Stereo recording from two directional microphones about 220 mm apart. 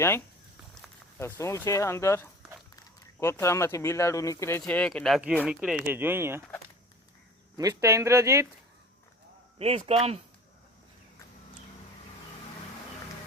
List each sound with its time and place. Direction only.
1.2 s speech: 10° left (ahead or behind); by 6.4 s 10° right (ahead or behind)
7.5 s speech: 15° right (ahead or behind)
9.6 s speech: 25° right (ahead or behind)